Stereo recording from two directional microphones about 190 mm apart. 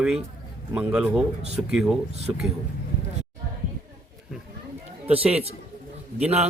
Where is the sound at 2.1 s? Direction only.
35° right (ahead or behind).